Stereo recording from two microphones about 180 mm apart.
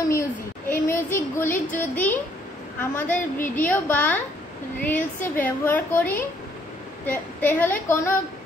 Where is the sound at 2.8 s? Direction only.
10° left (ahead or behind).